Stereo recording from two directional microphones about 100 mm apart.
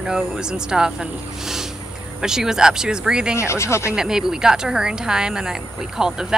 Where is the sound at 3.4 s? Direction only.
25° left (ahead or behind).